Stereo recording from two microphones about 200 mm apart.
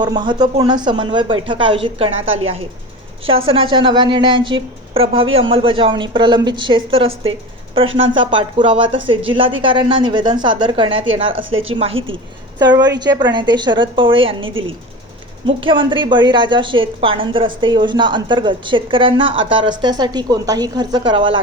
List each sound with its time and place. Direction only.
0.0 s a woman's voice: 20° right (ahead or behind)
15.4 s a woman's voice: 25° right (ahead or behind)